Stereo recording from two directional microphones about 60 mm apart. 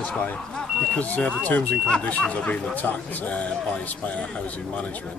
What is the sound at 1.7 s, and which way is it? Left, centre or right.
Speech, centre.